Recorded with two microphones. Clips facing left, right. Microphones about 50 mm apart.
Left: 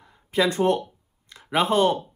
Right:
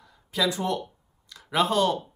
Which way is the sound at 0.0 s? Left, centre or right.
Left.